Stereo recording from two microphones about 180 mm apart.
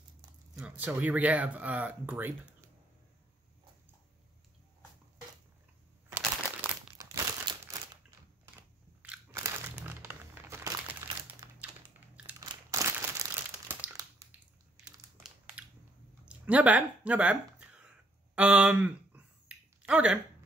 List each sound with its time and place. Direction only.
0.6 s speech: 10° right (ahead or behind)
6.0 s crumpling: 10° right (ahead or behind)
9.0 s crumpling: 10° right (ahead or behind)
16.3 s a sound: 5° right (ahead or behind)